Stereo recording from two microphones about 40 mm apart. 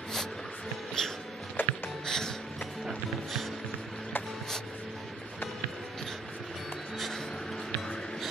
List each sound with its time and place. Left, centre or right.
1.0 s music: centre
1.6 s music: left
2.0 s music: centre